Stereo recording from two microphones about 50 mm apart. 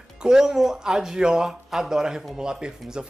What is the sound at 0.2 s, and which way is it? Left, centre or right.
Speech, centre.